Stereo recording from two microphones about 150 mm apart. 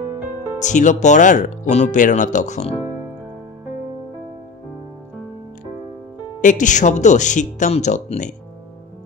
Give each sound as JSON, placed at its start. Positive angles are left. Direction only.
{"t": 0.6, "sound": "speech", "side_deg": 55}
{"t": 6.4, "sound": "speech", "side_deg": 55}